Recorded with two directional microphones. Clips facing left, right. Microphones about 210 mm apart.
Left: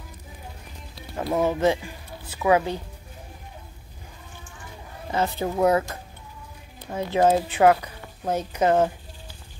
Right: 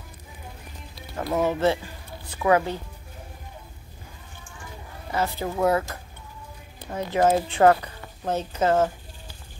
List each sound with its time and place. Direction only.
1.1 s speech: 15° left (ahead or behind)
5.1 s speech: 20° left (ahead or behind)
7.2 s speech: 20° left (ahead or behind)
7.5 s a woman's voice: 10° left (ahead or behind)